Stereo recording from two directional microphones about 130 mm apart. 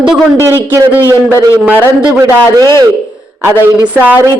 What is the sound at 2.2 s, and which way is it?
Speech, 30° right (ahead or behind).